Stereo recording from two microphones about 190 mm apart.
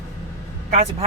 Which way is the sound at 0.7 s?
35° right (ahead or behind).